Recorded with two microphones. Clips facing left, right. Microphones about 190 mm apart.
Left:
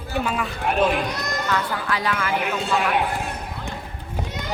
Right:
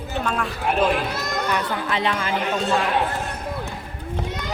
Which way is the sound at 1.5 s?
20° right (ahead or behind).